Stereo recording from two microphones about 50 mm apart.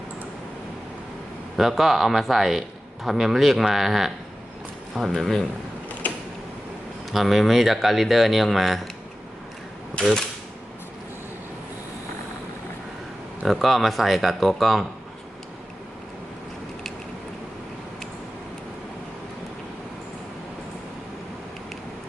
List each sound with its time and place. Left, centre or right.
1.5 s a man's voice: centre
6.0 s creak: left
7.1 s a man's voice: centre
10.0 s speech: left
13.5 s a man's voice: centre